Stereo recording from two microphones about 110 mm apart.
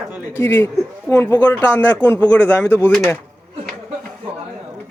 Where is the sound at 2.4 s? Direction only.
20° left (ahead or behind).